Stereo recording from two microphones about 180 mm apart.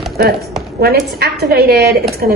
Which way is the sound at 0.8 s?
60° right (ahead or behind).